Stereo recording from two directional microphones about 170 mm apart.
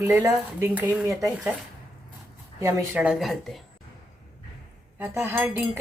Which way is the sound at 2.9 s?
5° right (ahead or behind).